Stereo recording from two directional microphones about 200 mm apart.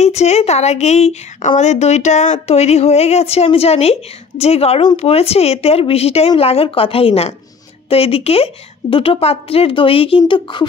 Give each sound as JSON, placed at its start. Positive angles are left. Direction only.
{"t": 0.0, "sound": "a woman's voice", "side_deg": 35}